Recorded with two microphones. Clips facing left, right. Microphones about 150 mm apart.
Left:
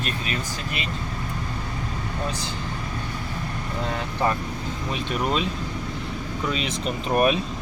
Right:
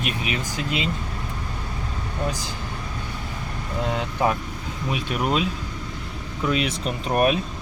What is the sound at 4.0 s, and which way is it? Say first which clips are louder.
Speech: right 1 dB; 10° right (ahead or behind).